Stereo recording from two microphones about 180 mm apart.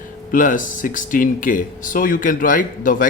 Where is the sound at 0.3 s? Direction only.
45° left (ahead or behind).